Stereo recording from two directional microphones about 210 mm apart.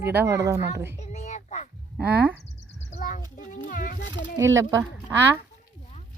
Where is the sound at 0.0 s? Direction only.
10° right (ahead or behind).